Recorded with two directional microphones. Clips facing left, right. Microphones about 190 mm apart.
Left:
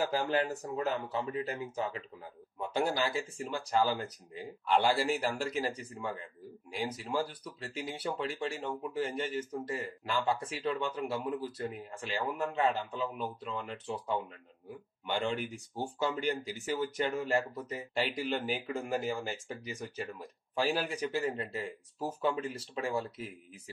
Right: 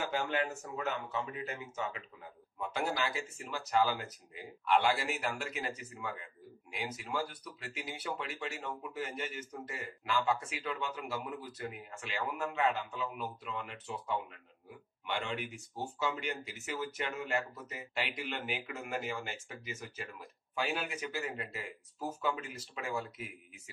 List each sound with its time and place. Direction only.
0.0 s speech: 35° left (ahead or behind)
15.2 s speech: centre (ahead or behind)
15.5 s speech: 35° left (ahead or behind)